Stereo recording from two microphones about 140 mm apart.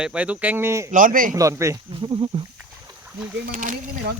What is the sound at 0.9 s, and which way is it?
Speech, 75° right (ahead or behind).